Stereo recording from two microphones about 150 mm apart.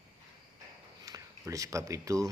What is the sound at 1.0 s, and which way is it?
Speech, 25° right (ahead or behind).